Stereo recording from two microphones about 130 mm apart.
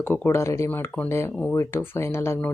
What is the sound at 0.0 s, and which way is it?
Speech, 15° left (ahead or behind).